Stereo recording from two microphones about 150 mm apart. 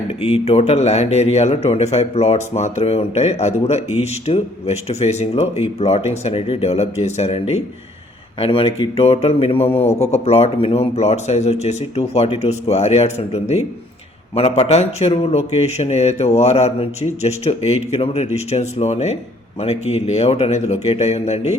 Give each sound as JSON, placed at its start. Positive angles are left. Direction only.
{"t": 0.2, "sound": "speech", "side_deg": 45}